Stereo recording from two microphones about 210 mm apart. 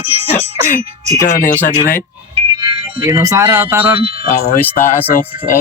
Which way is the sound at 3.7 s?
10° right (ahead or behind).